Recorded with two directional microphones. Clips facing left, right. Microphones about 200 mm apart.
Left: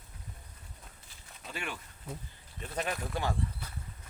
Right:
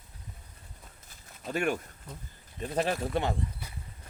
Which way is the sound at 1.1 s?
45° right (ahead or behind).